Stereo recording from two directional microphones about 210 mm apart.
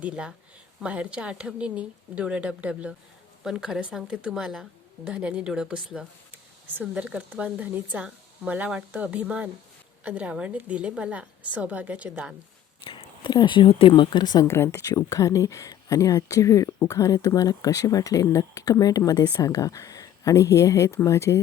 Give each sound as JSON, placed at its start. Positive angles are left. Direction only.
{"t": 0.0, "sound": "a woman's voice", "side_deg": -5}
{"t": 12.8, "sound": "speech", "side_deg": 25}